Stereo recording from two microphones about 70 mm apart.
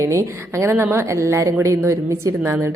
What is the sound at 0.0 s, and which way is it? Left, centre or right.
A woman's voice, right.